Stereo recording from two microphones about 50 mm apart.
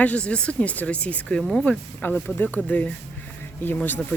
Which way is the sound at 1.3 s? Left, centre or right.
Centre.